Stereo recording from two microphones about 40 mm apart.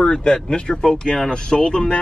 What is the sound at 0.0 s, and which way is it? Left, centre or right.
Speech, centre.